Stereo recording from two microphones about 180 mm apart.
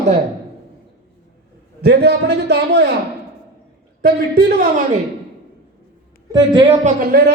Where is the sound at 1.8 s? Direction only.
60° right (ahead or behind).